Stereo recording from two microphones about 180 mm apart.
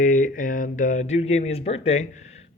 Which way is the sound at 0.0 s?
45° left (ahead or behind).